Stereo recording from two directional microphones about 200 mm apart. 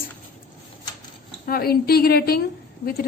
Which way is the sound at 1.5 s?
50° left (ahead or behind).